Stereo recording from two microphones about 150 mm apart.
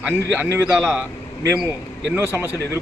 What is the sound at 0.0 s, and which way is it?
Speech, 10° right (ahead or behind).